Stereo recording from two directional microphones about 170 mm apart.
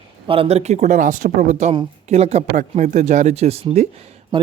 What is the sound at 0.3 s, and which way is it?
Speech, 35° right (ahead or behind).